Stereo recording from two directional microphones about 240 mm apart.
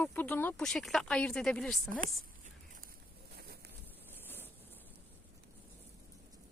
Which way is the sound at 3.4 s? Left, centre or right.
Right.